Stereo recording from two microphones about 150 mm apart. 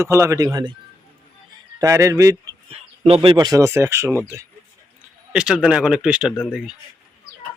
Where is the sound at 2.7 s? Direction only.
40° right (ahead or behind); by 4.2 s 20° right (ahead or behind).